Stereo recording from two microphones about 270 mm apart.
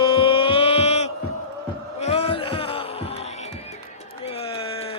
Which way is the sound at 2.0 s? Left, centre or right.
Left.